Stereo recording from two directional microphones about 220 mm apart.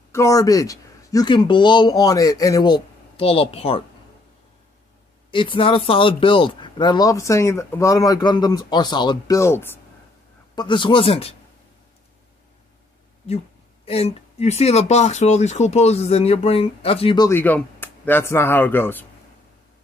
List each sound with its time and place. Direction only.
0.1 s speech: 15° left (ahead or behind)
5.3 s speech: 25° left (ahead or behind)
13.8 s speech: 25° left (ahead or behind)
17.3 s speech: 10° left (ahead or behind)